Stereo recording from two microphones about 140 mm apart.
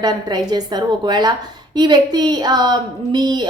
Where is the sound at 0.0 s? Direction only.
30° right (ahead or behind).